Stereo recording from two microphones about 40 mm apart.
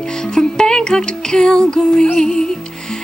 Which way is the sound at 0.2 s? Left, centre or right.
Centre.